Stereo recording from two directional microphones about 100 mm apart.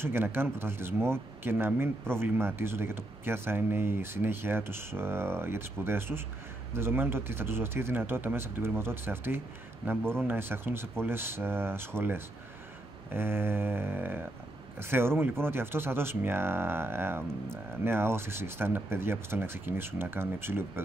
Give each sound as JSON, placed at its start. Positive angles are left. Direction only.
{"t": 0.0, "sound": "speech", "side_deg": -25}